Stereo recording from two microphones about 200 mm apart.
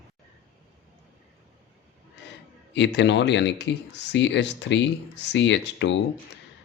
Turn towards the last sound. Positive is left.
turn(degrees=60)  # may be behind; listen again after turning